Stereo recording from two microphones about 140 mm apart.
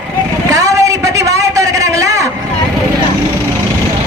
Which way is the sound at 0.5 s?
25° right (ahead or behind).